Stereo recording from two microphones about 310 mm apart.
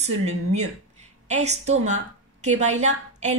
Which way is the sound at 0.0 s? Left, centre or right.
Right.